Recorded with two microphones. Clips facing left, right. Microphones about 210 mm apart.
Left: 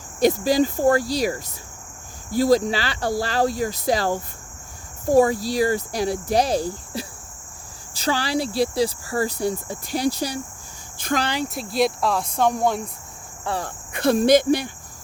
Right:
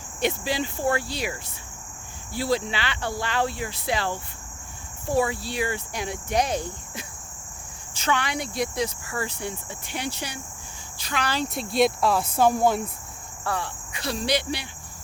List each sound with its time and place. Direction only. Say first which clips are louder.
0.2 s speech: left 8 dB; 40° left (ahead or behind)
10.9 s cricket: left 9 dB; 50° left (ahead or behind)
11.4 s speech: even; centre (ahead or behind)
13.6 s cricket: left 7 dB; 50° left (ahead or behind)